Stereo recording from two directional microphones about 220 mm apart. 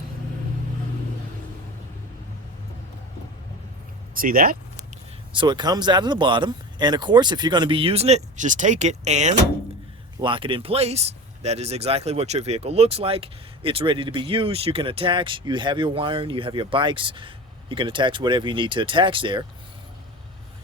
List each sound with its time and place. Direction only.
4.1 s speech: 40° right (ahead or behind)
5.3 s speech: 20° right (ahead or behind)